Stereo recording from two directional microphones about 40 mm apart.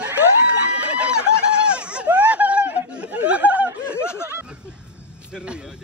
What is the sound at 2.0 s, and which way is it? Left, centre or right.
Snicker, right.